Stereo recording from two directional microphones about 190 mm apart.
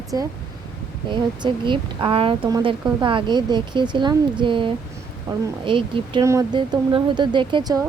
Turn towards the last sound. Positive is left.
turn(degrees=-20)  # may be behind; listen again after turning